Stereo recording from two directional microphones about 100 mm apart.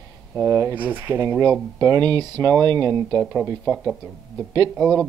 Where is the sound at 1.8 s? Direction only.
40° right (ahead or behind).